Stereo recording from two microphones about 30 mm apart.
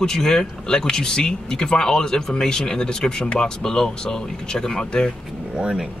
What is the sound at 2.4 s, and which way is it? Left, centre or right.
Speech, left.